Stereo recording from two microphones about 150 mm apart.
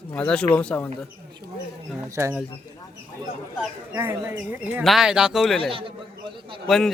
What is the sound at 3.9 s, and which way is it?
Speech, 20° right (ahead or behind).